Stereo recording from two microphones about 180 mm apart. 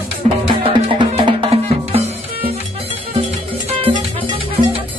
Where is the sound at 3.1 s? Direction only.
30° right (ahead or behind).